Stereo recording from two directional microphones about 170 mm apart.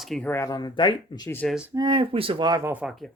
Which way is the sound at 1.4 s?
5° right (ahead or behind).